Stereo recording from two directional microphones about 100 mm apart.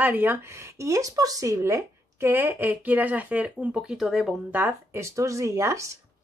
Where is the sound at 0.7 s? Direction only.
35° right (ahead or behind); by 4.4 s 5° right (ahead or behind).